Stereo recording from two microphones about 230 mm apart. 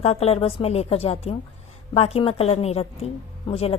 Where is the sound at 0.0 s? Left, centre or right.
Left.